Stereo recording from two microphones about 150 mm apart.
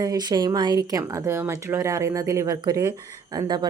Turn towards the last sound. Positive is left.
turn(degrees=-25)  # may be behind; listen again after turning